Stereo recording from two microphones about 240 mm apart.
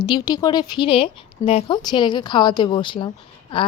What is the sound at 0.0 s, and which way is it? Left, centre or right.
Speech, centre.